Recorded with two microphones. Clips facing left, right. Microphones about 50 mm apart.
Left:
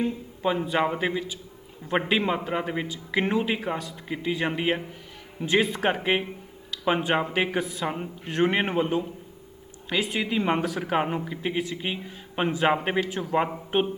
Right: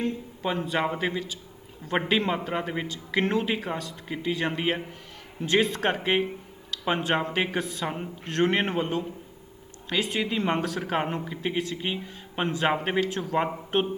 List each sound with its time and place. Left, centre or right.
0.4 s a man's voice: centre
2.8 s a man's voice: centre
7.6 s a man's voice: left
10.2 s a man's voice: centre